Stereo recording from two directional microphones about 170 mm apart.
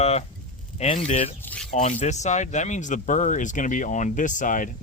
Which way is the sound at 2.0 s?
45° left (ahead or behind).